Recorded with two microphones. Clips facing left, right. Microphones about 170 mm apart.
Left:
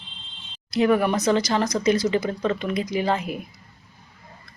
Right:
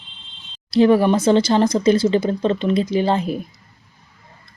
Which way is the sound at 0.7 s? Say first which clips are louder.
Right 6 dB; 30° right (ahead or behind).